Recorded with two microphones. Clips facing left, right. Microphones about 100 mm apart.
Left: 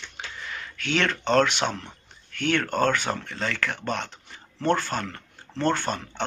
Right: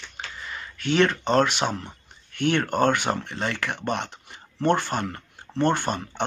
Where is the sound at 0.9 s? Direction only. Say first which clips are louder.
Right 1 dB; 10° right (ahead or behind).